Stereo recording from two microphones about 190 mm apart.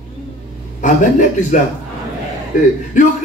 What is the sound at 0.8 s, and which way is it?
Speech, 40° left (ahead or behind).